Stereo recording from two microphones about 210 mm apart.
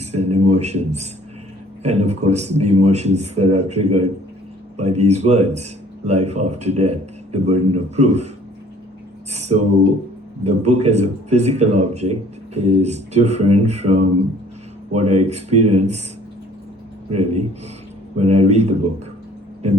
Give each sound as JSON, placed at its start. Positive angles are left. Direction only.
{"t": 0.0, "sound": "a sound", "side_deg": -30}
{"t": 1.8, "sound": "speech", "side_deg": -30}
{"t": 9.3, "sound": "speech", "side_deg": -30}
{"t": 15.1, "sound": "speech", "side_deg": -30}
{"t": 17.1, "sound": "speech", "side_deg": -30}